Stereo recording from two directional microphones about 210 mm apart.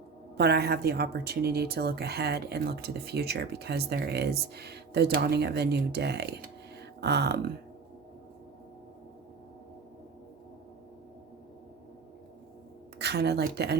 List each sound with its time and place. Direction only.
0.3 s speech: 50° right (ahead or behind)
13.0 s speech: 50° right (ahead or behind)